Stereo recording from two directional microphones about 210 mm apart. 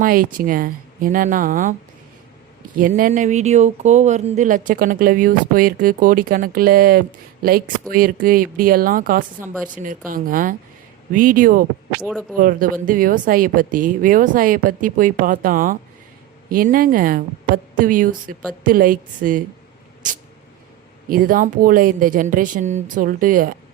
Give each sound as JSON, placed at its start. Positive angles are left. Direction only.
{"t": 0.0, "sound": "speech", "side_deg": -40}
{"t": 2.7, "sound": "speech", "side_deg": -40}
{"t": 21.1, "sound": "speech", "side_deg": -40}